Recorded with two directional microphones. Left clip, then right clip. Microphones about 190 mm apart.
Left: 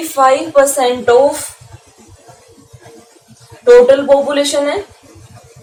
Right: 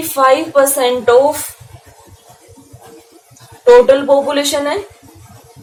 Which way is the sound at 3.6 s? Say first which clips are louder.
Left 1 dB; 30° right (ahead or behind).